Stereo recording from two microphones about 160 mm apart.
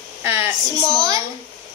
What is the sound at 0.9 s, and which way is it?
Speech, 25° right (ahead or behind).